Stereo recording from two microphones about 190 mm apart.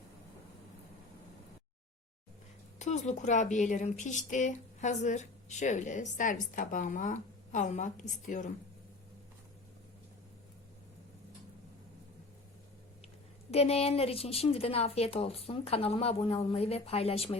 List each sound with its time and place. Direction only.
2.7 s speech: 40° left (ahead or behind)
13.5 s speech: 30° left (ahead or behind)